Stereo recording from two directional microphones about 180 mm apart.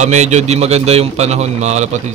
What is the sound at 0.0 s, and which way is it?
A man's voice, 40° right (ahead or behind).